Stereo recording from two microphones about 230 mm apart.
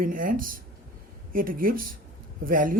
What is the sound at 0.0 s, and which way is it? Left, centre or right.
Speech, right.